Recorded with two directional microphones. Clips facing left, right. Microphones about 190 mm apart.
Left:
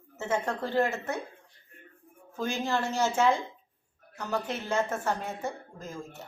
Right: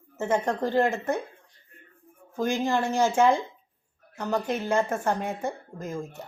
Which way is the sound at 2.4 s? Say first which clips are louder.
Right 5 dB; 15° right (ahead or behind).